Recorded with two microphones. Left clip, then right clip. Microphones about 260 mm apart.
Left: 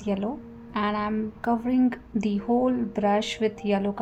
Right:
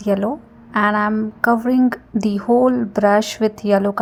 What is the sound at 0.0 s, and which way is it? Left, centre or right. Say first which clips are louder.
A woman's voice: right 10 dB; right.